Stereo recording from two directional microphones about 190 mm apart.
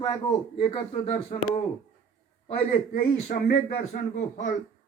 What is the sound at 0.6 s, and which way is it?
Speech, 30° left (ahead or behind).